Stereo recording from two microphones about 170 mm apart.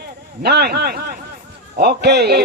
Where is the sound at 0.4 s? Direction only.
70° right (ahead or behind).